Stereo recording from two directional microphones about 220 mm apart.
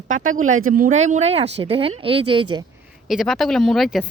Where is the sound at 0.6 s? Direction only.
40° right (ahead or behind); by 2.6 s 20° right (ahead or behind).